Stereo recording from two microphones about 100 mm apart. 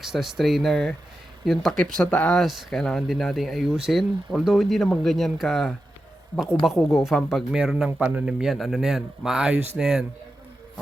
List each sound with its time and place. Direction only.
0.0 s speech: 5° right (ahead or behind)
2.3 s a man's voice: centre (ahead or behind)